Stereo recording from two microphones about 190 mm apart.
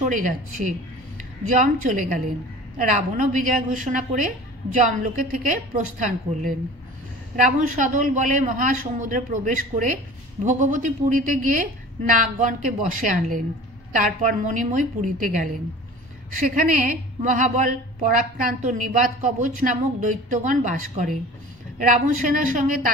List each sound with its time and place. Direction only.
0.0 s a woman's voice: 40° right (ahead or behind)